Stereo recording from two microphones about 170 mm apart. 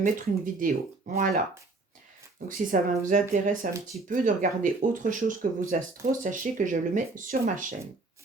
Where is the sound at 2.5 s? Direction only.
50° right (ahead or behind).